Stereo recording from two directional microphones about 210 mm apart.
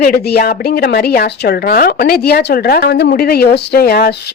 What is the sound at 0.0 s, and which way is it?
A woman's voice, 45° left (ahead or behind).